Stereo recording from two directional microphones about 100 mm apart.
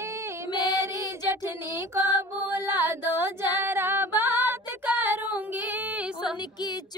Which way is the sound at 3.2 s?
25° right (ahead or behind).